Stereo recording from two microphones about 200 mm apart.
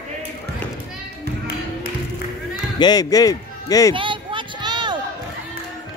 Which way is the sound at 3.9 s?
25° right (ahead or behind).